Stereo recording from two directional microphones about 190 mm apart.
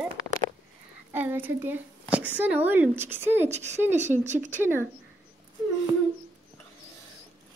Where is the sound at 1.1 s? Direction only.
10° right (ahead or behind).